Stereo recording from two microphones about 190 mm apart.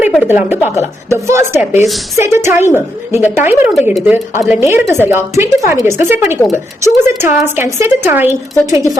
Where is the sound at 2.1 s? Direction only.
15° right (ahead or behind).